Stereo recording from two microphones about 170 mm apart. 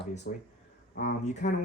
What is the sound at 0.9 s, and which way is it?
Speech, 50° left (ahead or behind).